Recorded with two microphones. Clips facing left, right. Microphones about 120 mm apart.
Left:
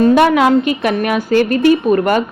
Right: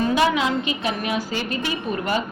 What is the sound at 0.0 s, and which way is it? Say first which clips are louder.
A woman's voice: left 9 dB; 55° left (ahead or behind).